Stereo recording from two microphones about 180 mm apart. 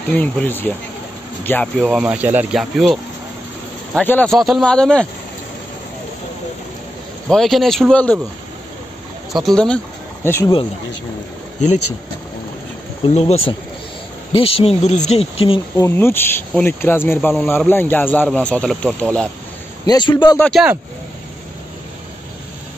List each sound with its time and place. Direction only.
0.1 s speech: 10° left (ahead or behind)
1.9 s speech: 5° right (ahead or behind)
4.0 s speech: 10° left (ahead or behind)
7.2 s speech: centre (ahead or behind)
9.3 s speech: centre (ahead or behind)
13.0 s speech: 35° left (ahead or behind)
15.8 s speech: 15° left (ahead or behind)
19.9 s a man's voice: 25° left (ahead or behind)
20.3 s speech: 5° left (ahead or behind)